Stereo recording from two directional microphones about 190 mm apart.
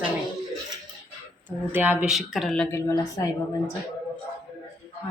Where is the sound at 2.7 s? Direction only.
15° left (ahead or behind).